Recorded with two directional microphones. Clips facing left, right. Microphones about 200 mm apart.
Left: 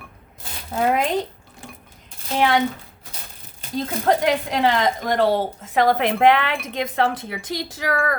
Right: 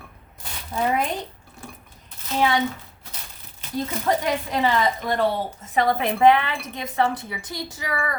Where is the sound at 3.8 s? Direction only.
90° left.